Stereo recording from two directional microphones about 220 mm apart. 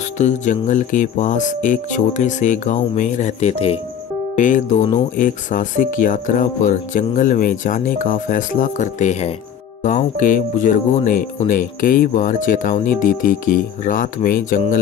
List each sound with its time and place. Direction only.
0.2 s speech: 35° left (ahead or behind)